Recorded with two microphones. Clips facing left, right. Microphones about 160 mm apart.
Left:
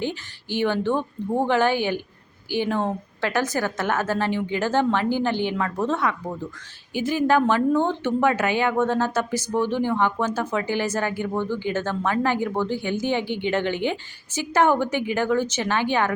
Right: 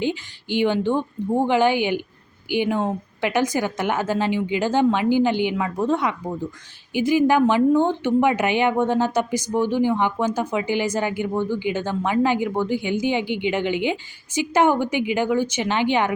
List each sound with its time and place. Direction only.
0.0 s speech: 15° right (ahead or behind)